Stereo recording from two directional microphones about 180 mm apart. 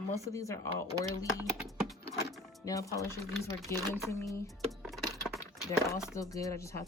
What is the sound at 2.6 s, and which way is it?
Speech, 20° left (ahead or behind).